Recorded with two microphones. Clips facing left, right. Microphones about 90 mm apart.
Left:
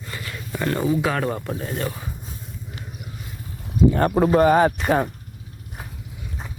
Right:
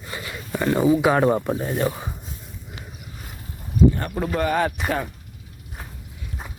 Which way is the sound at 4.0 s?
45° left (ahead or behind).